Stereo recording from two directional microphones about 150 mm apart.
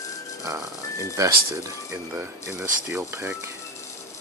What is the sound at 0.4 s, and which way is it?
Speech, 20° right (ahead or behind).